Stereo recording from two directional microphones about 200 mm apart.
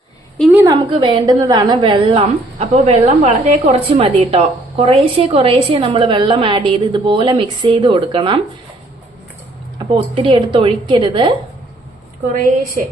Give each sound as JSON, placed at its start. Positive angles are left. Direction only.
{"t": 0.5, "sound": "a sound", "side_deg": -15}
{"t": 0.9, "sound": "a woman's voice", "side_deg": -25}
{"t": 9.7, "sound": "a woman's voice", "side_deg": -25}